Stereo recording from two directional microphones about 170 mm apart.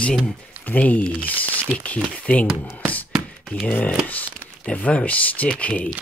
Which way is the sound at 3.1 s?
Centre (ahead or behind).